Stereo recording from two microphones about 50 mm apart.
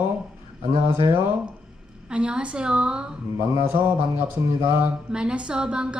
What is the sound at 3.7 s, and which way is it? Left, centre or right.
Speech, right.